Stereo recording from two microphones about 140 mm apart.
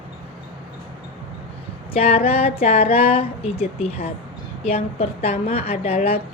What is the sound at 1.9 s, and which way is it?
A woman's voice, 45° left (ahead or behind).